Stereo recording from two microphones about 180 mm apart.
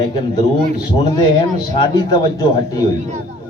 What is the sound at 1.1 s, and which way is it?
A man's voice, 25° left (ahead or behind).